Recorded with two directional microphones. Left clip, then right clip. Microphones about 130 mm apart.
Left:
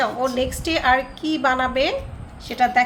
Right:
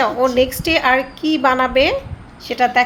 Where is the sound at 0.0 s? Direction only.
25° right (ahead or behind).